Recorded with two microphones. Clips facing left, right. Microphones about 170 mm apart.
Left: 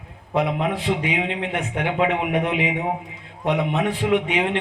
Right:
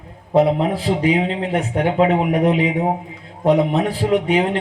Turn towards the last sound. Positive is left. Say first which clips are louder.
# right 4 dB
turn(degrees=-35)  # may be behind; listen again after turning